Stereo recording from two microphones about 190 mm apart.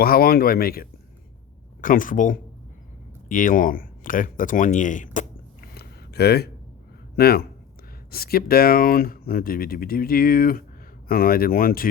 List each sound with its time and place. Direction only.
0.0 s speech: 50° left (ahead or behind)
5.7 s a sound: 55° left (ahead or behind)
7.2 s speech: 55° left (ahead or behind)